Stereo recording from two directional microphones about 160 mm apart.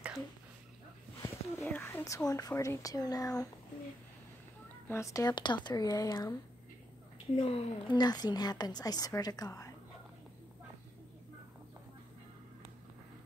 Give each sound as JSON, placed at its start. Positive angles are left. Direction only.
{"t": 1.2, "sound": "speech", "side_deg": 15}
{"t": 4.8, "sound": "a woman's voice", "side_deg": 20}
{"t": 7.3, "sound": "a woman's voice", "side_deg": 30}